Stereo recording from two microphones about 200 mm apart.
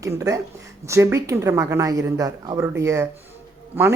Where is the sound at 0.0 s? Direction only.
15° right (ahead or behind).